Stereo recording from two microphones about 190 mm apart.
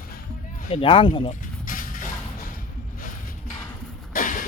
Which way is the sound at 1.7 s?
45° left (ahead or behind).